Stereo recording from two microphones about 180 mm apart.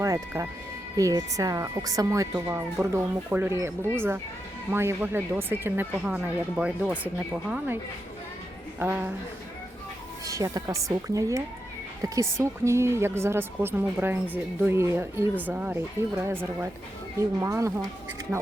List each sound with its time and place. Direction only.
0.0 s a woman's voice: 20° right (ahead or behind)
8.8 s a woman's voice: 10° right (ahead or behind)
10.2 s a woman's voice: 20° right (ahead or behind)